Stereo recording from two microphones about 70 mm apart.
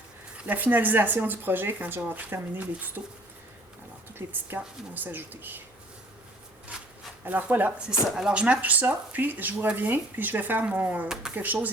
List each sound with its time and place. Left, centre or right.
0.3 s speech: right
4.1 s speech: right
7.3 s speech: right
8.0 s speech: centre